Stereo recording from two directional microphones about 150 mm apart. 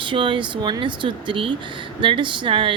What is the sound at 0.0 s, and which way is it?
Speech, 35° right (ahead or behind).